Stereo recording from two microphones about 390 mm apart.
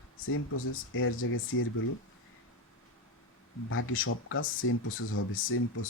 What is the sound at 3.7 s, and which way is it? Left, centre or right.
Speech, left.